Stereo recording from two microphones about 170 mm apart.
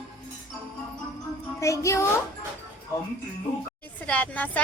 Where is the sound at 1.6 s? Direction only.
15° left (ahead or behind).